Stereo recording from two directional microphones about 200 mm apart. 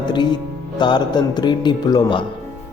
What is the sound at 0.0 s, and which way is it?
Music, 20° left (ahead or behind).